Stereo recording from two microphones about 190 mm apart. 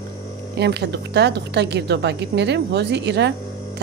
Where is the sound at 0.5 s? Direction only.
60° right (ahead or behind).